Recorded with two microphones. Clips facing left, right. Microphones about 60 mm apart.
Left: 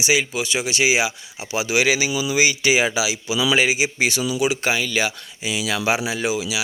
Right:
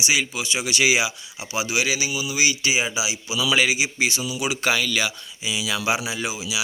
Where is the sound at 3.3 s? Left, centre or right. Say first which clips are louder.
Left 2 dB; left.